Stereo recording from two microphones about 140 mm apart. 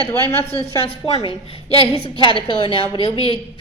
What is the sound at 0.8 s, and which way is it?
Speech, 45° left (ahead or behind).